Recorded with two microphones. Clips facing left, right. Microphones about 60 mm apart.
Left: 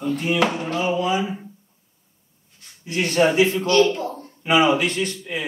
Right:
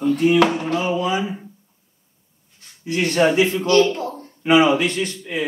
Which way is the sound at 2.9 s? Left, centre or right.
Right.